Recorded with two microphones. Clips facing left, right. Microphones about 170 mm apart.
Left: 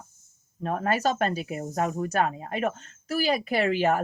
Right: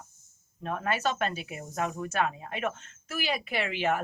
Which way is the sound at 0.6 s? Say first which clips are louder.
Left 4 dB; 40° left (ahead or behind).